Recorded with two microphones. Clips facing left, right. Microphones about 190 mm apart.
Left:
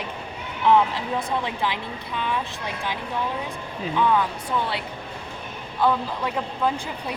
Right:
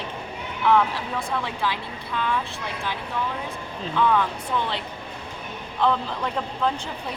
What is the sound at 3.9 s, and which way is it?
Speech, 15° left (ahead or behind).